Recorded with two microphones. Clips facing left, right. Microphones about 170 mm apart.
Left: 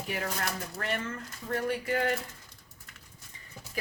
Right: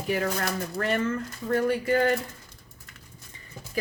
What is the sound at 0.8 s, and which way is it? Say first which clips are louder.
Speech: right 8 dB; 40° right (ahead or behind).